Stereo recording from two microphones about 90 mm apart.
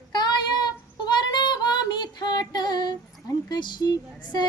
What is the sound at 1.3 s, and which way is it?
Female singing, 55° left (ahead or behind).